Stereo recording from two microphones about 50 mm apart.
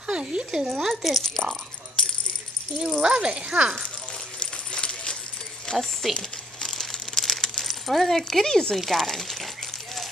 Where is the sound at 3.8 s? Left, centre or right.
Centre.